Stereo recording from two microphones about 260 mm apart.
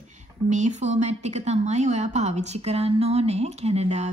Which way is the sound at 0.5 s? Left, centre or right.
Right.